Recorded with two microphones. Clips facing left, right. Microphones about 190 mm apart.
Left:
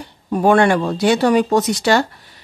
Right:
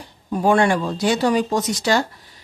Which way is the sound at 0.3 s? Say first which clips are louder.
Left 3 dB; 60° left (ahead or behind).